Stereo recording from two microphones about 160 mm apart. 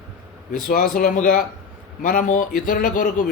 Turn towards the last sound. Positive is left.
turn(degrees=55)  # may be behind; listen again after turning